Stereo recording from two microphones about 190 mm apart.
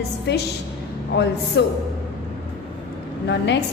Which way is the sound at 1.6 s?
65° left (ahead or behind).